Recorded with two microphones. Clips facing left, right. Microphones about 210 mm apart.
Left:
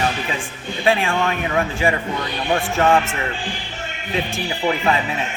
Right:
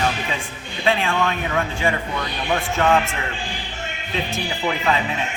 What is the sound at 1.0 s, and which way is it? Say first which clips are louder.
A man's voice: left 1 dB; 30° left (ahead or behind).